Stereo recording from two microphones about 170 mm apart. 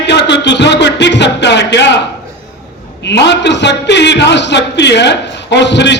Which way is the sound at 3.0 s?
90° left.